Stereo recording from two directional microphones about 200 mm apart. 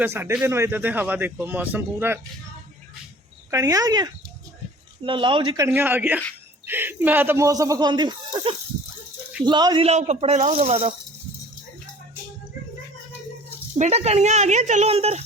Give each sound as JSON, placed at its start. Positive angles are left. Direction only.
{"t": 0.0, "sound": "speech", "side_deg": -10}
{"t": 3.5, "sound": "speech", "side_deg": -15}
{"t": 5.6, "sound": "speech", "side_deg": -10}
{"t": 13.7, "sound": "speech", "side_deg": -35}